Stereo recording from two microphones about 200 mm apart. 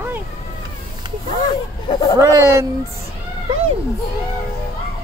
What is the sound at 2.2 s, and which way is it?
Speech, 15° right (ahead or behind).